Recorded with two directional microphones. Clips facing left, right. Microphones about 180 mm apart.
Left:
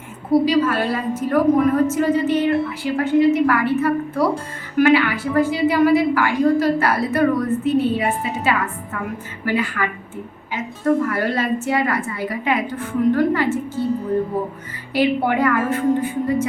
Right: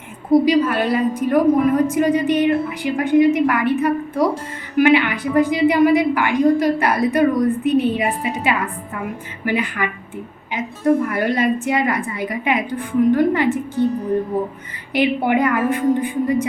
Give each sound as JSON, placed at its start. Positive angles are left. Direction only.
{"t": 0.3, "sound": "a woman's voice", "side_deg": -15}
{"t": 14.9, "sound": "a woman's voice", "side_deg": -20}